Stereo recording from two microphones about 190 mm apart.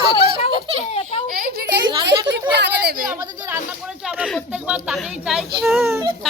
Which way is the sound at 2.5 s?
60° right (ahead or behind).